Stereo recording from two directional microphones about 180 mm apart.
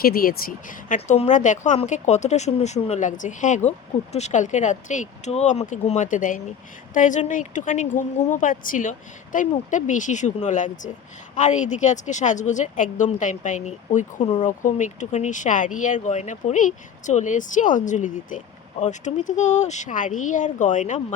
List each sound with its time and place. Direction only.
0.0 s speech: 55° left (ahead or behind)